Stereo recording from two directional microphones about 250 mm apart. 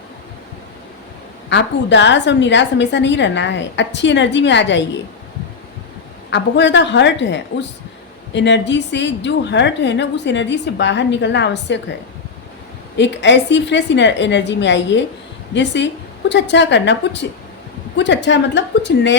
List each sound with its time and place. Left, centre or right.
1.5 s a woman's voice: left
6.3 s a woman's voice: left
13.0 s a woman's voice: left